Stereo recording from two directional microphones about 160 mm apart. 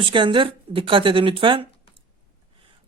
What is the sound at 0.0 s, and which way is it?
Speech, 30° right (ahead or behind).